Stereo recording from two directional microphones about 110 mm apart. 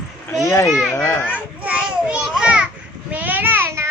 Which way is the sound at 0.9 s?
20° left (ahead or behind).